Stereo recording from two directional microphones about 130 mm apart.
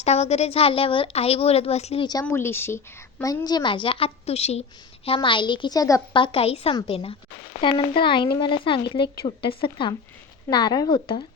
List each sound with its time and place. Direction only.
0.0 s a woman's voice: 55° left (ahead or behind)
2.2 s a woman's voice: 20° left (ahead or behind); by 4.6 s 55° left (ahead or behind)
5.0 s a woman's voice: 40° left (ahead or behind)
6.1 s a woman's voice: 45° left (ahead or behind)